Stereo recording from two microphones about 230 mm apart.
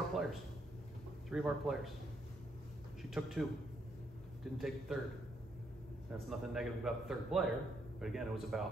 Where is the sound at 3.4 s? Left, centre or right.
Centre.